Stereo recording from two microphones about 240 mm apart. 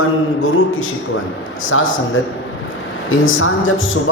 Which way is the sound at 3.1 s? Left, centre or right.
Left.